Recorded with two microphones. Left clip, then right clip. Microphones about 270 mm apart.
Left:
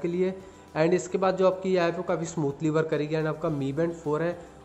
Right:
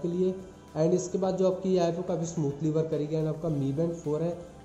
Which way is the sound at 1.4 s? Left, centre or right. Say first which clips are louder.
Even; centre.